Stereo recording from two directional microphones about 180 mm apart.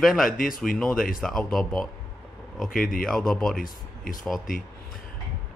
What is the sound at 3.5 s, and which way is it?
Speech, 50° left (ahead or behind).